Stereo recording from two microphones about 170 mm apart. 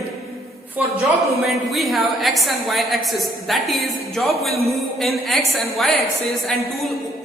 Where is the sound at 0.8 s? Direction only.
10° right (ahead or behind).